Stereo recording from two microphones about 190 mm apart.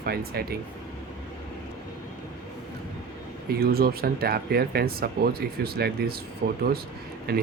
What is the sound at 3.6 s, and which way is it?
Speech, 55° right (ahead or behind).